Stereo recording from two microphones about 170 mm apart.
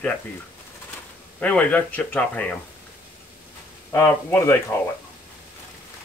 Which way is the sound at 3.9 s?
15° left (ahead or behind).